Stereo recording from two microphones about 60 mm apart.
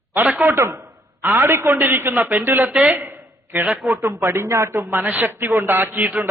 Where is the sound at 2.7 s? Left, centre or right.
Right.